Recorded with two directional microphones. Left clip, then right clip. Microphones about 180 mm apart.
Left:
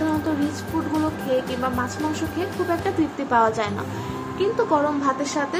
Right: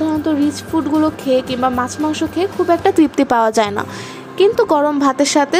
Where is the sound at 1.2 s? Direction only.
60° right (ahead or behind).